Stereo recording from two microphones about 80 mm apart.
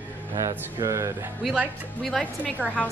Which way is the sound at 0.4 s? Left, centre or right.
Right.